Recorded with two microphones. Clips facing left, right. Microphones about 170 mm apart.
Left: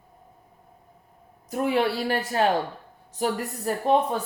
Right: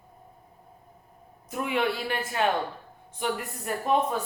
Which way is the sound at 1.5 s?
35° left (ahead or behind).